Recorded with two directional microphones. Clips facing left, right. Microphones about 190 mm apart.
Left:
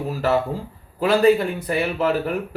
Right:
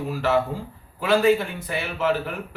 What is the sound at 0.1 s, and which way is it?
Speech, 40° left (ahead or behind).